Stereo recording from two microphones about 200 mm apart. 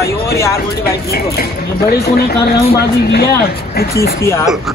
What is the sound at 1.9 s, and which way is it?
Speech, 50° left (ahead or behind).